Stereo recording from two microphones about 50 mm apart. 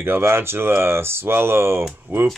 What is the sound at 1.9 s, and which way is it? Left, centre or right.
Speech, right.